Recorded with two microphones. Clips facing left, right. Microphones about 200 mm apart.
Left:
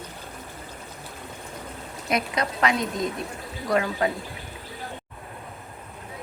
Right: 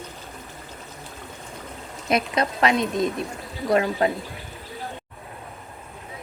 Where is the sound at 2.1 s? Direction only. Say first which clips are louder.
Right 3 dB; 25° right (ahead or behind).